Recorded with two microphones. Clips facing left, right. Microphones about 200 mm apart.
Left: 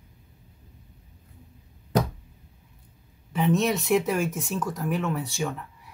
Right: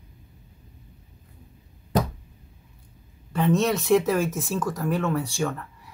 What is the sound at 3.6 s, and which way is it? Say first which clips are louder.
Speech: right 3 dB; centre (ahead or behind).